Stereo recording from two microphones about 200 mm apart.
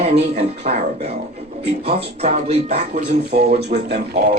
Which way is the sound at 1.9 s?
30° right (ahead or behind).